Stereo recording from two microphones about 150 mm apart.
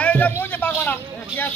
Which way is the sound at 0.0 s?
10° left (ahead or behind).